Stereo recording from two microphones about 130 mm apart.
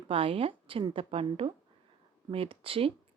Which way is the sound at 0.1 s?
45° right (ahead or behind).